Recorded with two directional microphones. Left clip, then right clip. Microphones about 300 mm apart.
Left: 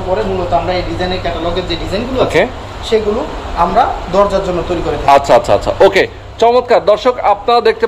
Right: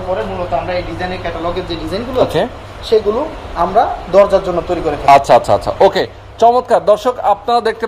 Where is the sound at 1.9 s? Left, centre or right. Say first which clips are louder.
Right 1 dB; right.